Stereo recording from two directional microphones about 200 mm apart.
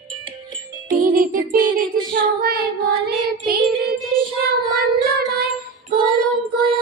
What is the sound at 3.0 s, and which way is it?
Music, 50° right (ahead or behind).